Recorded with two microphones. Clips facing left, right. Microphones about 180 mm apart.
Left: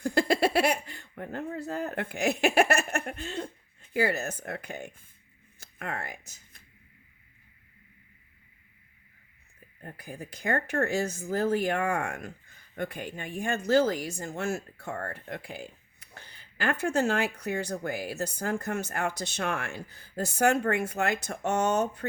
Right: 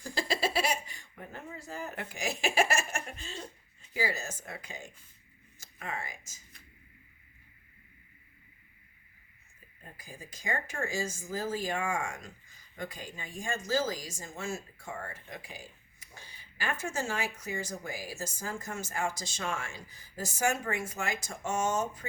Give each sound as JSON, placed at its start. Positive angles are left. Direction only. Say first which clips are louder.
{"t": 0.0, "sound": "speech", "louder": "left 8 dB", "side_deg": 60}
{"t": 9.8, "sound": "speech", "louder": "left 8 dB", "side_deg": 65}